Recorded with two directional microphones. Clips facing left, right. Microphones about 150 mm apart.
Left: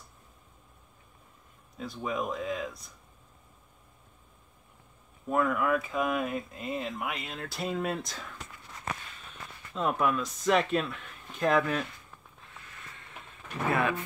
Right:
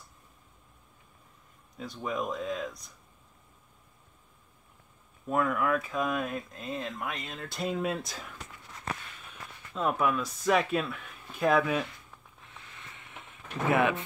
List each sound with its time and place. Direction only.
1.8 s speech: centre (ahead or behind)
5.3 s speech: centre (ahead or behind)
9.8 s speech: centre (ahead or behind)
12.9 s a sound: 20° right (ahead or behind)